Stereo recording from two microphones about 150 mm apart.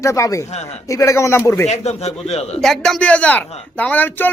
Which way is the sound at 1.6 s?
45° left (ahead or behind).